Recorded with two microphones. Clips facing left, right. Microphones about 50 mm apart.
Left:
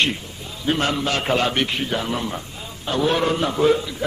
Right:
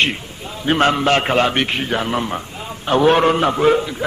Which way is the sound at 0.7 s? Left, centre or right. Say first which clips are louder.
Right 6 dB; right.